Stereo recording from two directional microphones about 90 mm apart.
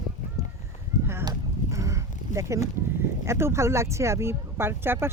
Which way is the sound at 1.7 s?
35° right (ahead or behind).